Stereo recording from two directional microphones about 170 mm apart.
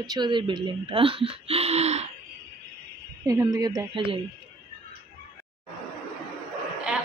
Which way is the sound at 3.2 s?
20° right (ahead or behind).